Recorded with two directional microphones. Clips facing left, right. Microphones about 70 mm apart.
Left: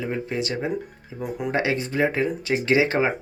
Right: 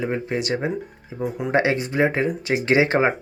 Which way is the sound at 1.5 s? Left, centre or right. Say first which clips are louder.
Right 4 dB; right.